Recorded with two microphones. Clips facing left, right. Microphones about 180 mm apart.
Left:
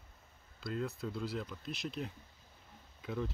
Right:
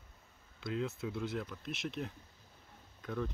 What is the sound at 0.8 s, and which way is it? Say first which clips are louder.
Speech: even; centre (ahead or behind).